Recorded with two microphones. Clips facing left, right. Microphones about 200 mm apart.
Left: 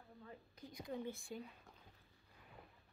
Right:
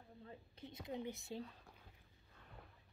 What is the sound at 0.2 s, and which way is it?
A woman's voice, 25° right (ahead or behind).